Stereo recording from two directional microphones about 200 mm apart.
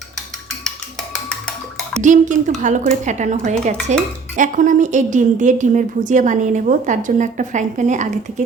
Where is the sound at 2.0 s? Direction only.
40° right (ahead or behind).